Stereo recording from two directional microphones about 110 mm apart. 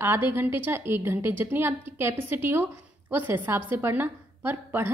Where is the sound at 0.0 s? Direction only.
20° right (ahead or behind).